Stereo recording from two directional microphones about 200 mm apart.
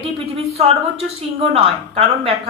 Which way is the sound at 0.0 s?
30° right (ahead or behind).